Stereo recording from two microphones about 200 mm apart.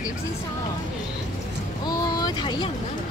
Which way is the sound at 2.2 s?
20° left (ahead or behind).